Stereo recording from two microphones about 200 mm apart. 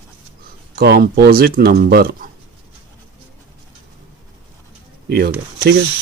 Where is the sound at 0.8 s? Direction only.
50° right (ahead or behind).